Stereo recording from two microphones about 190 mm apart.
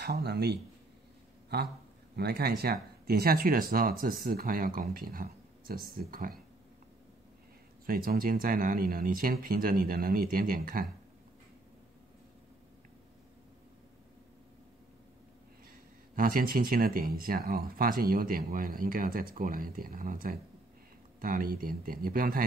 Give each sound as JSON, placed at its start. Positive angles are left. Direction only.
{"t": 0.0, "sound": "speech", "side_deg": -60}
{"t": 2.1, "sound": "speech", "side_deg": -55}
{"t": 7.8, "sound": "speech", "side_deg": -50}
{"t": 16.2, "sound": "speech", "side_deg": -45}